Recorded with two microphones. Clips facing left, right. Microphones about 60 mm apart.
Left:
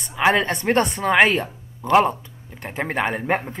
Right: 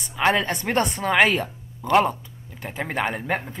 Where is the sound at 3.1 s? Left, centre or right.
Centre.